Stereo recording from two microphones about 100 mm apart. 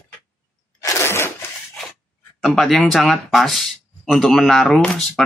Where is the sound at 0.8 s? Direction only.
25° left (ahead or behind).